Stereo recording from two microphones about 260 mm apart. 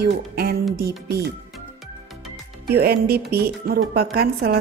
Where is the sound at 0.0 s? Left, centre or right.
Right.